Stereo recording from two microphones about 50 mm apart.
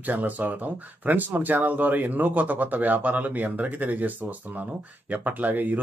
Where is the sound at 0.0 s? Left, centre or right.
Right.